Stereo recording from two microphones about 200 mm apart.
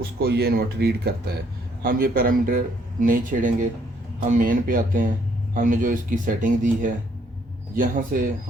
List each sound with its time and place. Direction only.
0.2 s a man's voice: 55° right (ahead or behind)